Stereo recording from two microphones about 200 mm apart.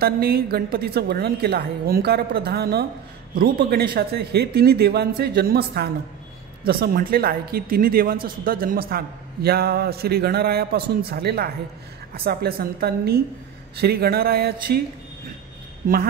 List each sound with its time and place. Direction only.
0.0 s a man's voice: 50° right (ahead or behind)